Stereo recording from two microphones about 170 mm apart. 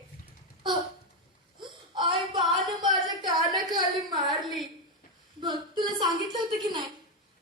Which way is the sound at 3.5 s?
25° right (ahead or behind).